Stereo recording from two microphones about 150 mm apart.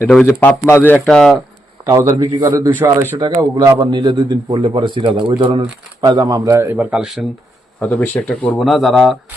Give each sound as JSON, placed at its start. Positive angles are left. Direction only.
{"t": 0.0, "sound": "a man's voice", "side_deg": 5}
{"t": 1.8, "sound": "a man's voice", "side_deg": -20}
{"t": 3.9, "sound": "a man's voice", "side_deg": -30}
{"t": 7.8, "sound": "speech", "side_deg": 10}